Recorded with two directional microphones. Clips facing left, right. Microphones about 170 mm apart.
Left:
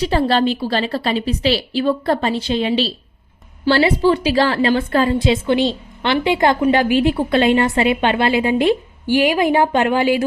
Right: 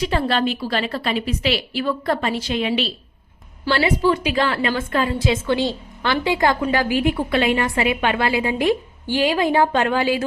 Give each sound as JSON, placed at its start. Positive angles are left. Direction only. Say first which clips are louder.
{"t": 0.0, "sound": "a woman's voice", "louder": "left 4 dB", "side_deg": 35}
{"t": 5.2, "sound": "a woman's voice", "louder": "left 4 dB", "side_deg": 20}